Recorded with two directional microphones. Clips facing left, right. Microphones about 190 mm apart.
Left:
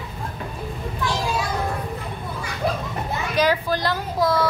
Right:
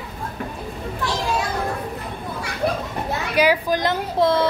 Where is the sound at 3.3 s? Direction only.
10° right (ahead or behind).